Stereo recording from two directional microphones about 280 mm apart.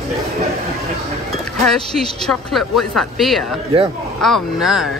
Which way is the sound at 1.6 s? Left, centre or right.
Centre.